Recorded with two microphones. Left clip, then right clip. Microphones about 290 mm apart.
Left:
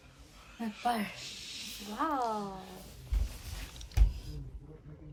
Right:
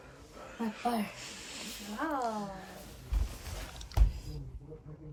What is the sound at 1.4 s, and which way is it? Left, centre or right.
Snake, centre.